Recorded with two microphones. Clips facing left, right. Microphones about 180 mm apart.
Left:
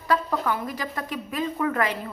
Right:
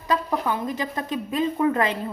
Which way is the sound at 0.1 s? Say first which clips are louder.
Even; 20° right (ahead or behind).